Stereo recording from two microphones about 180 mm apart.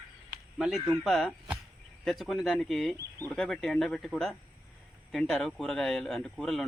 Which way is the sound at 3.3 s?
5° left (ahead or behind).